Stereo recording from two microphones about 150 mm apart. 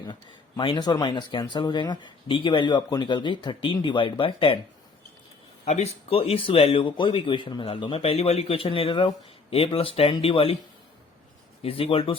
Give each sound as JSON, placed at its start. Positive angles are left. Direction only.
{"t": 0.0, "sound": "speech", "side_deg": 30}
{"t": 5.6, "sound": "speech", "side_deg": 45}
{"t": 11.6, "sound": "speech", "side_deg": 40}